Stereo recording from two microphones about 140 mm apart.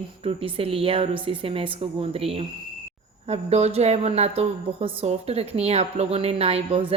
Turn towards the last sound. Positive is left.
turn(degrees=-45)  # may be behind; listen again after turning